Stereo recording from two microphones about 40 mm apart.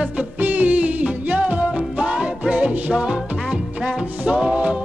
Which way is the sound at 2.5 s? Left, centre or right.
Right.